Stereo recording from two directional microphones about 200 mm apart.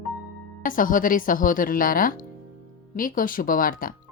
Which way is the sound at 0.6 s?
45° left (ahead or behind).